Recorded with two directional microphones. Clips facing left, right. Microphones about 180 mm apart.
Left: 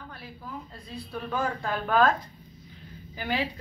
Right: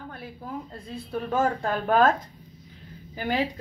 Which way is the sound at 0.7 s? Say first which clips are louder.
Right 5 dB; 50° right (ahead or behind).